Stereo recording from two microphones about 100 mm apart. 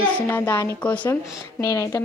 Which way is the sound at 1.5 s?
30° left (ahead or behind).